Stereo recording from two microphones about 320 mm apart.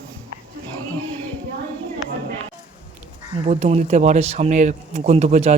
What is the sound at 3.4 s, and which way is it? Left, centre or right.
Speech, centre.